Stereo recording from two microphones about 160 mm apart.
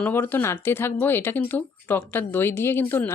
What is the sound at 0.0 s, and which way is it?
Speech, 10° left (ahead or behind).